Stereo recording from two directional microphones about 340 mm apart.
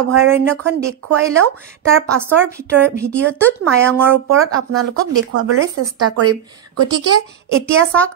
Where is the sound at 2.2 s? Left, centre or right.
Centre.